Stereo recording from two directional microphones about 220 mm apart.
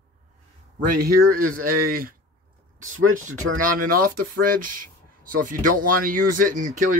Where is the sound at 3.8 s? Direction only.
40° right (ahead or behind).